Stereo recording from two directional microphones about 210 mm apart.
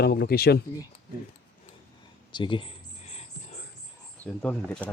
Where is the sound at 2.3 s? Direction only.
20° left (ahead or behind).